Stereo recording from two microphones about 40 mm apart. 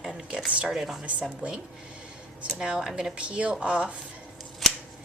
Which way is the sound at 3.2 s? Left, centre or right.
Right.